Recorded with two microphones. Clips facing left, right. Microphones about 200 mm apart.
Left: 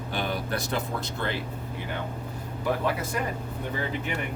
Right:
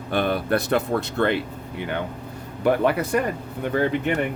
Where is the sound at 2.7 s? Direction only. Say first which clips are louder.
Right 8 dB; 65° right (ahead or behind).